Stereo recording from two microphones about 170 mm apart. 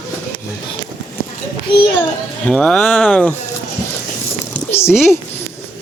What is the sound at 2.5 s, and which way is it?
Speech, 5° left (ahead or behind).